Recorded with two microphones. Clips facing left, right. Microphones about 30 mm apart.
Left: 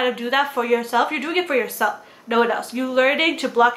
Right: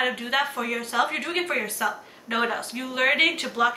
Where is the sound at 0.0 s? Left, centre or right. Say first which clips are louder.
Left 4 dB; centre.